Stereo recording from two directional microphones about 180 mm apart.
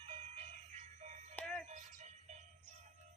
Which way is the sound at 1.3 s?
5° left (ahead or behind).